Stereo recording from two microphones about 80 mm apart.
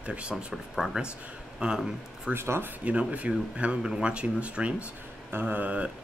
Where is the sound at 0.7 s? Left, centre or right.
Centre.